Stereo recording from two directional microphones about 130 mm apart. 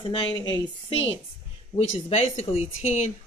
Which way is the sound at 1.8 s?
55° left (ahead or behind).